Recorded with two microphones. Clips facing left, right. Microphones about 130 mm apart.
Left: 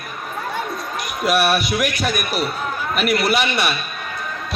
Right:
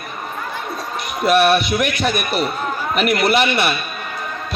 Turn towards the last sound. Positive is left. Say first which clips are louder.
# right 3 dB
turn(degrees=-5)  # may be behind; listen again after turning